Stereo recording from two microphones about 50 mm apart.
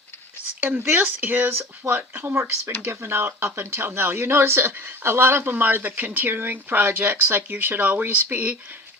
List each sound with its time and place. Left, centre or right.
0.6 s speech: right
1.5 s speech: right
2.3 s speech: right
2.6 s speech: right